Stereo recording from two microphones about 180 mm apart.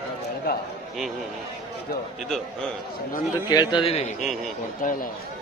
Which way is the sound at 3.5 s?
25° left (ahead or behind).